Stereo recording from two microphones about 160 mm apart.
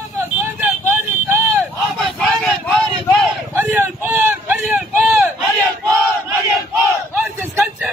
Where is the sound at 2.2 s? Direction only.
Centre (ahead or behind).